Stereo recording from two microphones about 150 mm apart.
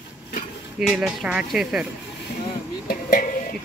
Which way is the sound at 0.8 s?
5° right (ahead or behind).